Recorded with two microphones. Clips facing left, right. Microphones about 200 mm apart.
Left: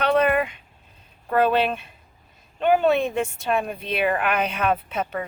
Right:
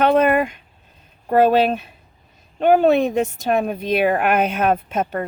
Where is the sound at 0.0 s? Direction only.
45° right (ahead or behind).